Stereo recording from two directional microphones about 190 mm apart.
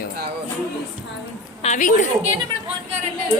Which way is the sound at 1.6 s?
40° left (ahead or behind).